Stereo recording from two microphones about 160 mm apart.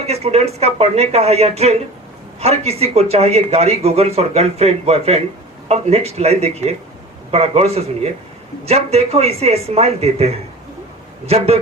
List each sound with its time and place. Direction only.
0.0 s a man's voice: 40° right (ahead or behind)